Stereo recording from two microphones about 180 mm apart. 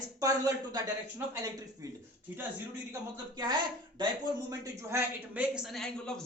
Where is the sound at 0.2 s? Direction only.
20° right (ahead or behind).